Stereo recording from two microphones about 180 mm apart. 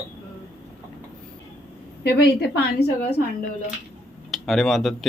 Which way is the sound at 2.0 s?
65° left (ahead or behind).